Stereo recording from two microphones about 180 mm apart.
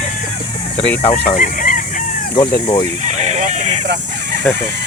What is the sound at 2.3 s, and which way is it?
Chicken, 25° left (ahead or behind).